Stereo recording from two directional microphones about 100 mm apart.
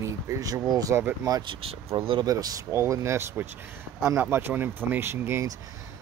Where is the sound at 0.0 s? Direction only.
35° right (ahead or behind).